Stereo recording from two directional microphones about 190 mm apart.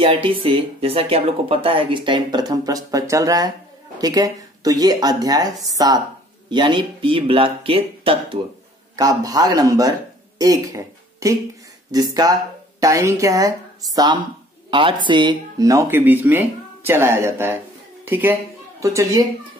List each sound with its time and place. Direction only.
0.0 s speech: 30° right (ahead or behind)